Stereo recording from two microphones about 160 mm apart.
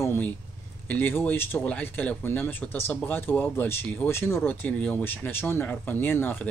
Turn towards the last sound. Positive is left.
turn(degrees=10)  # may be behind; listen again after turning